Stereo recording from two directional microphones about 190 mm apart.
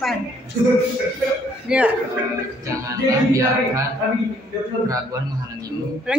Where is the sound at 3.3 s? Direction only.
15° right (ahead or behind).